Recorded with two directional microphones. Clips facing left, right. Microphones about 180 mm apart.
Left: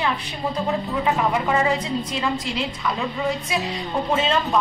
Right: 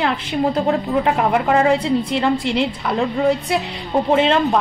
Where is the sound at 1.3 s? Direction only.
60° right (ahead or behind).